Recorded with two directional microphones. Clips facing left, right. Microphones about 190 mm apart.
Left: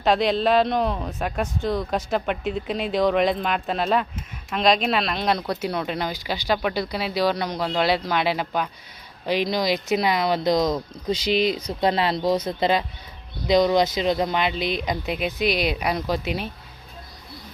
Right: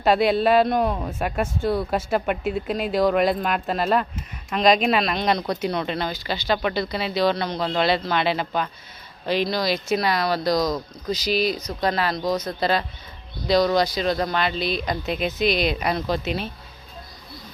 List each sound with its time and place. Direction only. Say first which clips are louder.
0.0 s speech: right 2 dB; 5° right (ahead or behind); by 16.5 s 10° left (ahead or behind)